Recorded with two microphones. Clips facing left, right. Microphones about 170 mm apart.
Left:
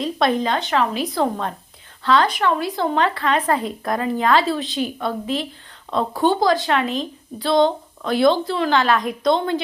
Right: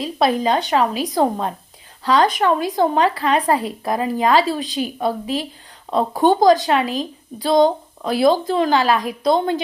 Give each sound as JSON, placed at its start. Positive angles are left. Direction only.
{"t": 0.0, "sound": "a woman's voice", "side_deg": -5}
{"t": 8.3, "sound": "a woman's voice", "side_deg": -45}
{"t": 8.6, "sound": "a woman's voice", "side_deg": -10}